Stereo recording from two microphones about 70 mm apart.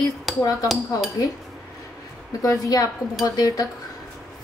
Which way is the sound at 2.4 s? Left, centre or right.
Left.